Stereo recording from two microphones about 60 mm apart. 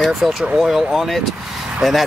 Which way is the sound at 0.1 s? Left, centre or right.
Centre.